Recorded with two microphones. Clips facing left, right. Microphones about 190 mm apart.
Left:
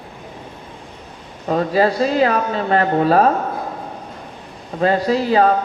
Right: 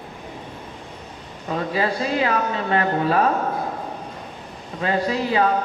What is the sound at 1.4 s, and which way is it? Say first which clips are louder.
A woman's voice: left 7 dB; 40° left (ahead or behind).